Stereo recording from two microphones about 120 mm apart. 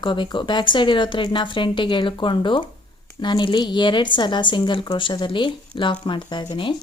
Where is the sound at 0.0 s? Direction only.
40° left (ahead or behind).